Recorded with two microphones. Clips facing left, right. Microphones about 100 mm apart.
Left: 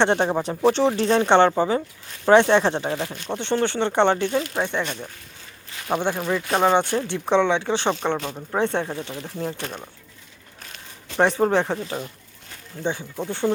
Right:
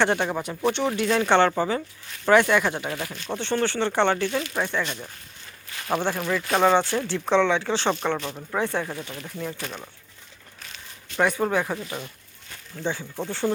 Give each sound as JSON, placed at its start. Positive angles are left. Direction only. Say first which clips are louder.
{"t": 0.0, "sound": "speech", "louder": "left 3 dB", "side_deg": 25}
{"t": 5.9, "sound": "speech", "louder": "left 2 dB", "side_deg": 15}
{"t": 11.2, "sound": "speech", "louder": "left 4 dB", "side_deg": 30}